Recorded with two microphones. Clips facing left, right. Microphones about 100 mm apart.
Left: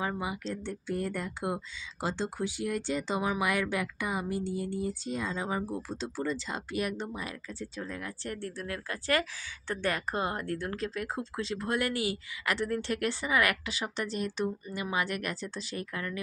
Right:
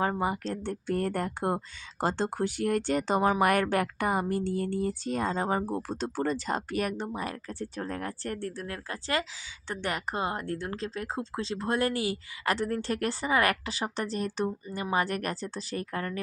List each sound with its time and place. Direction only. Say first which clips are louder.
0.2 s speech: right 5 dB; 50° right (ahead or behind)
6.0 s speech: right 3 dB; 55° right (ahead or behind); by 16.2 s 40° right (ahead or behind)